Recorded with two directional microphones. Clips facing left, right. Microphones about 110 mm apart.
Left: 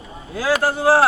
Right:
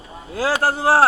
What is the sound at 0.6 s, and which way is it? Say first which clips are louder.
Speech: left 1 dB; 35° right (ahead or behind).